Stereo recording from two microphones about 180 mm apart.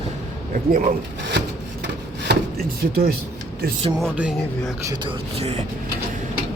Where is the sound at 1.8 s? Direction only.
70° right (ahead or behind).